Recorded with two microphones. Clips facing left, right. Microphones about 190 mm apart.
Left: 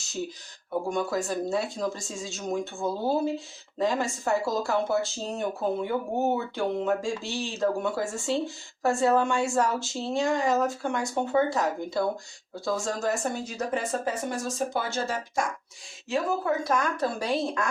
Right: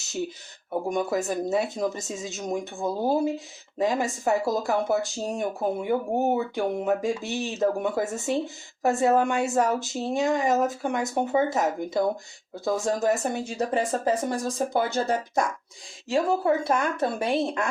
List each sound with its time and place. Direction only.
0.9 s speech: 20° right (ahead or behind)
13.4 s speech: 30° right (ahead or behind)